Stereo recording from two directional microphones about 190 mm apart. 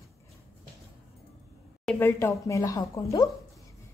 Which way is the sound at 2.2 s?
15° left (ahead or behind).